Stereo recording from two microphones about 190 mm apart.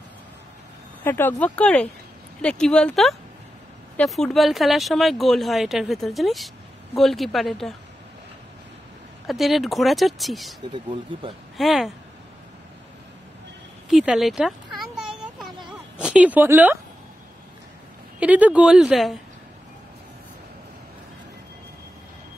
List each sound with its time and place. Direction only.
1.0 s speech: 10° left (ahead or behind)
9.3 s speech: centre (ahead or behind)
10.7 s speech: 30° right (ahead or behind)
11.5 s speech: centre (ahead or behind)
13.8 s a sound: centre (ahead or behind)
16.0 s speech: 5° right (ahead or behind)
18.2 s speech: 10° right (ahead or behind)